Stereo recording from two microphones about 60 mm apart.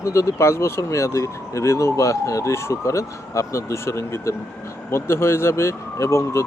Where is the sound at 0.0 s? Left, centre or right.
Left.